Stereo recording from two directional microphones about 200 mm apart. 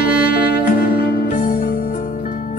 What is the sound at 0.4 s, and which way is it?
Music, 45° left (ahead or behind).